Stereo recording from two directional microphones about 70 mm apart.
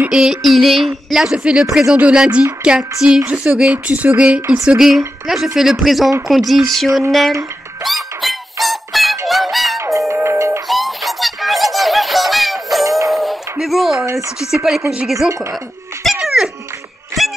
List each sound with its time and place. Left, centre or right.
0.1 s speech: centre
2.0 s child singing: centre
3.3 s speech: centre
4.7 s speech: centre
7.8 s music: centre
9.8 s music: right
10.7 s music: centre
13.1 s a sound: centre
14.5 s speech: centre
16.0 s dog: centre
17.2 s a sound: centre